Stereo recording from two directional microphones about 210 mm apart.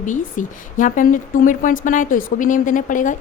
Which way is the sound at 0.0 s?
40° left (ahead or behind).